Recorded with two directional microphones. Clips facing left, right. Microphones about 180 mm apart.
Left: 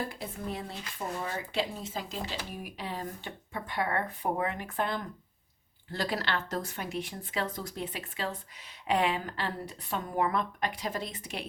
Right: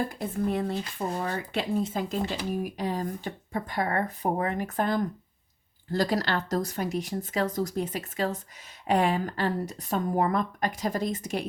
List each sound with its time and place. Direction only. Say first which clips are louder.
0.1 s speech: right 9 dB; 50° right (ahead or behind)